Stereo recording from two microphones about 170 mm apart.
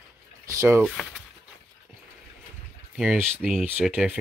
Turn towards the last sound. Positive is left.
turn(degrees=-5)  # may be behind; listen again after turning